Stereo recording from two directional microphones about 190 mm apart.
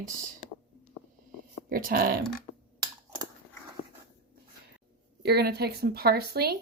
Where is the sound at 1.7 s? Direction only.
50° right (ahead or behind).